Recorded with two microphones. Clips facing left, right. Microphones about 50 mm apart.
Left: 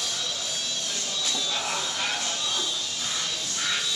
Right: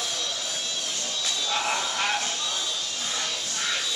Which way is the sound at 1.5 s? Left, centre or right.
Right.